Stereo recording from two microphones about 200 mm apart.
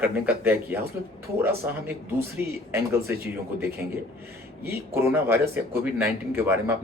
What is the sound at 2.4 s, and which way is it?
Speech, 10° right (ahead or behind).